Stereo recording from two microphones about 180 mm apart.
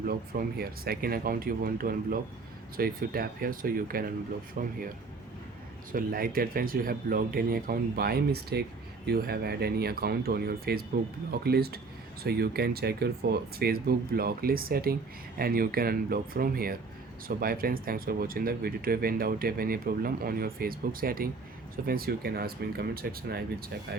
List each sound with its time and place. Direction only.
0.1 s speech: 55° right (ahead or behind)
5.9 s speech: 55° right (ahead or behind)